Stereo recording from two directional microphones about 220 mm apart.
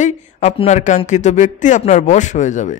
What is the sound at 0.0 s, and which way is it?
Speech, 30° left (ahead or behind).